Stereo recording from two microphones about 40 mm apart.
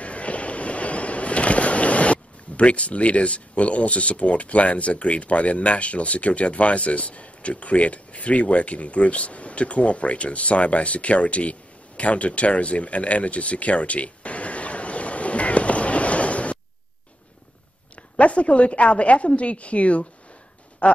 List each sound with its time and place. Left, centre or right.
0.0 s vehicle: left
12.0 s a sound: left
17.9 s a woman's voice: left
20.8 s quack: left